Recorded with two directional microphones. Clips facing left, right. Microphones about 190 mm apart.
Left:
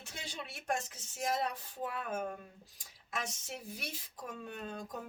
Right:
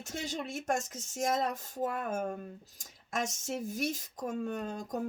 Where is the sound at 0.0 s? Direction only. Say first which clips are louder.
Right 9 dB; 45° right (ahead or behind).